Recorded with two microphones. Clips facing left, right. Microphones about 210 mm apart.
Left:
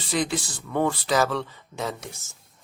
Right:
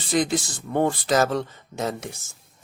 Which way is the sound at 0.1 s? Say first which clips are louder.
Right 4 dB; 45° right (ahead or behind).